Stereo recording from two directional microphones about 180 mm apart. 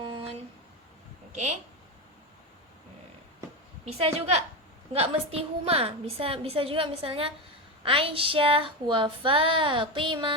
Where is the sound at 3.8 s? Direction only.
35° right (ahead or behind).